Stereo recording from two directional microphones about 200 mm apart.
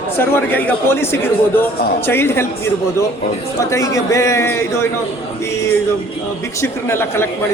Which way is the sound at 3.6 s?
15° left (ahead or behind).